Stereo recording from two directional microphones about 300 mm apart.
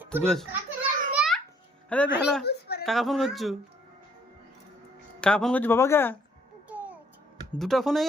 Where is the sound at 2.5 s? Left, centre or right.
Left.